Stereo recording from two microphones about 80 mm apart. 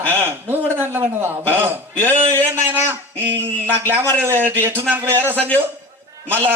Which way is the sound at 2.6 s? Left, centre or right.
Right.